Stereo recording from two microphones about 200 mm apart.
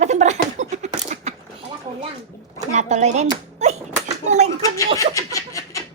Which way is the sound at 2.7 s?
35° right (ahead or behind).